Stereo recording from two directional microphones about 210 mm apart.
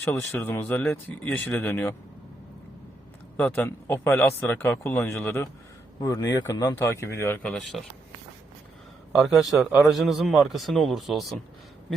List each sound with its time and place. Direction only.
0.0 s speech: 10° left (ahead or behind)
3.3 s speech: 5° left (ahead or behind)
9.1 s a man's voice: centre (ahead or behind)